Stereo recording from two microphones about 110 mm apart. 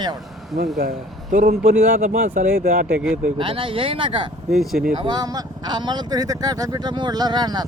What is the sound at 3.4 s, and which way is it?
Speech, 55° right (ahead or behind).